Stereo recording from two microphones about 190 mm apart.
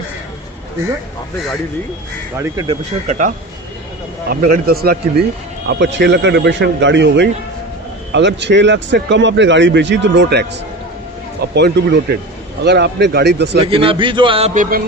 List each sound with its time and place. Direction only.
3.1 s a man's voice: 45° right (ahead or behind)
4.3 s a man's voice: 55° right (ahead or behind)
5.6 s speech: 70° right (ahead or behind)
11.5 s a man's voice: 60° right (ahead or behind)
13.7 s a man's voice: 30° right (ahead or behind)